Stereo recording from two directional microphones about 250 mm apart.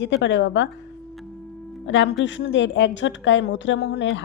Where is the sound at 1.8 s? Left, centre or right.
Left.